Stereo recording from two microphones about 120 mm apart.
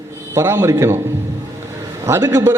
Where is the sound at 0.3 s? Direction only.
20° right (ahead or behind).